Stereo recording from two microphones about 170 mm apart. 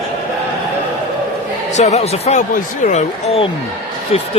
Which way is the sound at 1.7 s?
40° left (ahead or behind).